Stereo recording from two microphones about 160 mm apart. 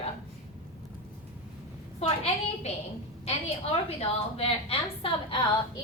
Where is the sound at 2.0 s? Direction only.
40° left (ahead or behind).